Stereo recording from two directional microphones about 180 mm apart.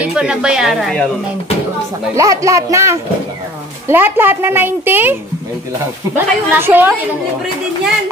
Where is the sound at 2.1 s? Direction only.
20° right (ahead or behind).